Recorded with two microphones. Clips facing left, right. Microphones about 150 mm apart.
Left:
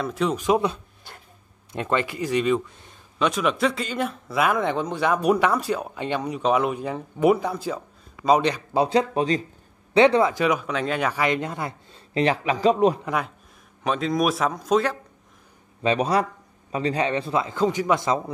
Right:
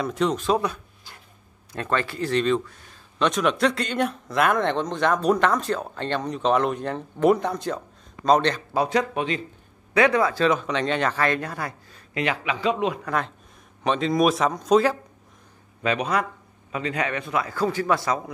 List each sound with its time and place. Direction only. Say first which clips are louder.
0.0 s speech: right 1 dB; 5° left (ahead or behind)
0.4 s speech: left 2 dB; 20° left (ahead or behind)
3.2 s speech: right 1 dB; 5° left (ahead or behind)
8.7 s speech: left 4 dB; 30° left (ahead or behind)
10.3 s speech: right 1 dB; 10° left (ahead or behind); by 13.0 s 40° left (ahead or behind)
13.0 s speech: even; 10° left (ahead or behind)
13.8 s speech: right 2 dB; centre (ahead or behind)
15.8 s speech: left 3 dB; 30° left (ahead or behind)